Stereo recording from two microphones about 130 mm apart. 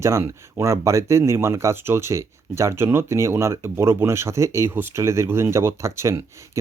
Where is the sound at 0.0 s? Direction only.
20° right (ahead or behind).